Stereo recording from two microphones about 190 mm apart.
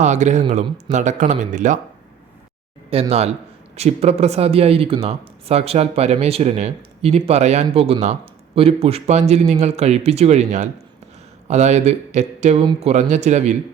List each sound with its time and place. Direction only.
0.0 s speech: 40° right (ahead or behind)
2.9 s speech: 30° right (ahead or behind)